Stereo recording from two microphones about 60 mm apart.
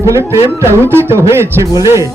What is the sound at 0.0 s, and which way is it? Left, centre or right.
Speech, right.